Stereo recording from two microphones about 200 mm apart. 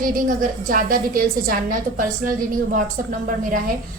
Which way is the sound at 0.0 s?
40° right (ahead or behind).